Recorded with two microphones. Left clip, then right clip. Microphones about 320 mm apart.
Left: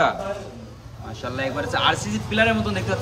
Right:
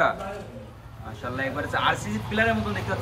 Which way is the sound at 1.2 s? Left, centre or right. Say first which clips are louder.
Left 3 dB; centre.